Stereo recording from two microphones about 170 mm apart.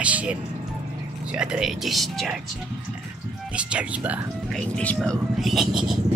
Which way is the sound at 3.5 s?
10° right (ahead or behind).